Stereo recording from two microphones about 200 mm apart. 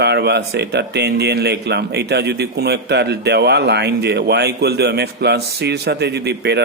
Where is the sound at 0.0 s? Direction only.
55° right (ahead or behind).